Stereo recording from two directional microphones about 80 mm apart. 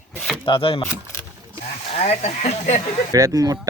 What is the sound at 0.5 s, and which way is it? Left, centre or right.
Speech, left.